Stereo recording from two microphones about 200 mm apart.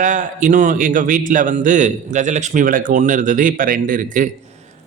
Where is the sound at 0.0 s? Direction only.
40° right (ahead or behind).